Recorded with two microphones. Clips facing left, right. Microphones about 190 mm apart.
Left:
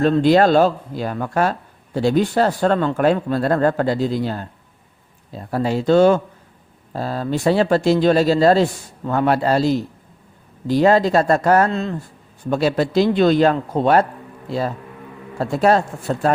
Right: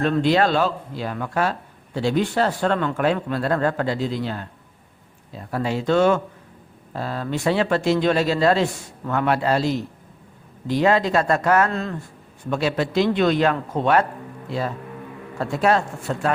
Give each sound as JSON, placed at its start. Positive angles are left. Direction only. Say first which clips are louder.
{"t": 0.0, "sound": "speech", "louder": "left 5 dB", "side_deg": 40}
{"t": 11.7, "sound": "speech", "louder": "left 3 dB", "side_deg": 20}
{"t": 12.5, "sound": "speech", "louder": "left 4 dB", "side_deg": 35}
{"t": 15.4, "sound": "speech", "louder": "left 4 dB", "side_deg": 35}